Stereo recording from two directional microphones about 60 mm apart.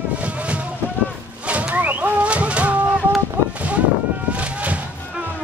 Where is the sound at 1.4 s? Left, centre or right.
Right.